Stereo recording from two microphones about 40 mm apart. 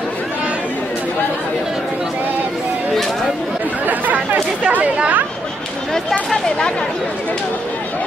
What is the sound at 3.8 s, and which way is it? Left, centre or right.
Speech, right.